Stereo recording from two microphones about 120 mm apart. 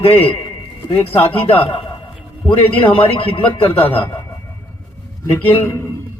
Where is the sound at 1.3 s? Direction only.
50° left (ahead or behind).